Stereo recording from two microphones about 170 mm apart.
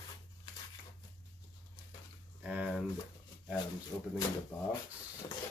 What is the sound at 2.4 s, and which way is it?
Speech, 5° right (ahead or behind).